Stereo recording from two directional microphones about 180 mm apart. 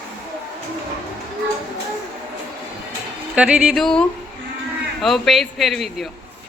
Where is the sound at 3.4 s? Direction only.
5° right (ahead or behind).